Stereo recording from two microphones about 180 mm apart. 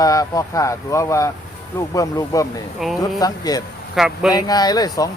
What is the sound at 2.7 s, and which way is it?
Speech, centre (ahead or behind).